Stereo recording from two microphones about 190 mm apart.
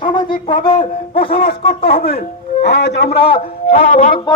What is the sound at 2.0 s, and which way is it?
Speech, 50° left (ahead or behind).